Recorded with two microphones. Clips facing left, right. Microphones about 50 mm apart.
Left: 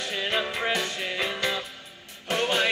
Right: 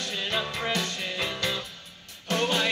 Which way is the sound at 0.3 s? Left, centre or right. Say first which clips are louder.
Left 3 dB; left.